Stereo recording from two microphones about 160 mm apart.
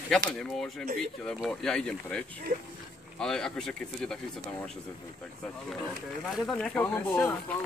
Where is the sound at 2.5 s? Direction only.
50° right (ahead or behind).